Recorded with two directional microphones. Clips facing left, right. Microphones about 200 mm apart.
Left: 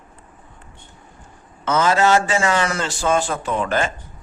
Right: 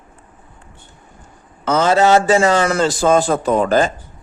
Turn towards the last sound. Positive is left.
turn(degrees=-40)  # may be behind; listen again after turning